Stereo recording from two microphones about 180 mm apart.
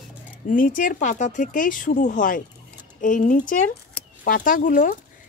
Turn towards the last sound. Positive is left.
turn(degrees=50)  # may be behind; listen again after turning